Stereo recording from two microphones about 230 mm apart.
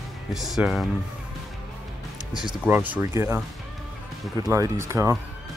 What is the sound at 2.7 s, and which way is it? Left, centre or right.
Speech, centre.